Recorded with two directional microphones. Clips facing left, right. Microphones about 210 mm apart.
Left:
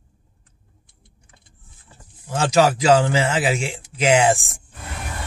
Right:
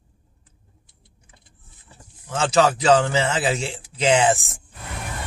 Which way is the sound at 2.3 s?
10° left (ahead or behind).